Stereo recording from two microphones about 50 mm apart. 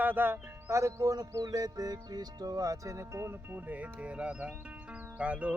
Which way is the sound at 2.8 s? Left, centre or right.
Right.